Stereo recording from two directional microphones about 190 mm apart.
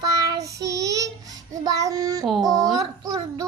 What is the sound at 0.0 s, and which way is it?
Child singing, 20° right (ahead or behind).